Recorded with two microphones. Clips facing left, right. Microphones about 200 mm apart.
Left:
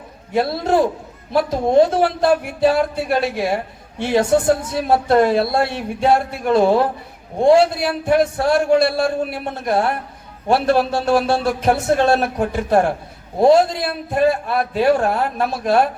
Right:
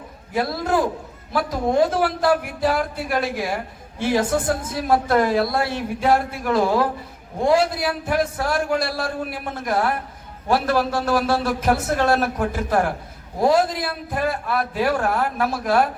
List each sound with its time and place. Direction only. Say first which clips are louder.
0.3 s a man's voice: left 4 dB; 25° left (ahead or behind)